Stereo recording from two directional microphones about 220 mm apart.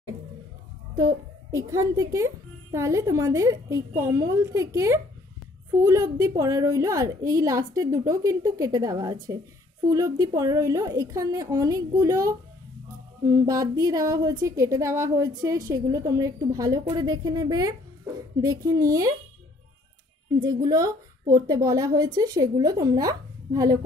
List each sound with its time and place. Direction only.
1.5 s a woman's voice: 15° right (ahead or behind)
20.3 s a woman's voice: 20° right (ahead or behind)